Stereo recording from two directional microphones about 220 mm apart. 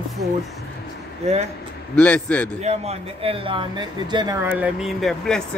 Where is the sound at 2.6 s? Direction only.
30° right (ahead or behind).